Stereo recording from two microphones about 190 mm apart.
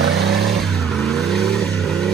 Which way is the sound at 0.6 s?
Centre (ahead or behind).